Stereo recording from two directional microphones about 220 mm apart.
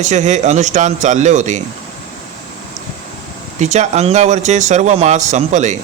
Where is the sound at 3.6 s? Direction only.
30° right (ahead or behind).